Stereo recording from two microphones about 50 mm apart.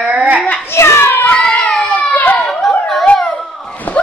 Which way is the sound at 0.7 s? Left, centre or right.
Left.